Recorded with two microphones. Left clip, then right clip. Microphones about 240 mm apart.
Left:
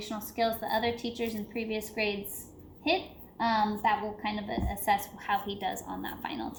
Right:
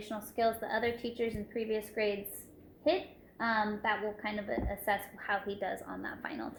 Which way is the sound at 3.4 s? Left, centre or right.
Left.